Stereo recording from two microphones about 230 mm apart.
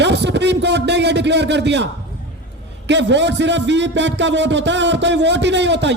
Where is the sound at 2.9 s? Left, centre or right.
Right.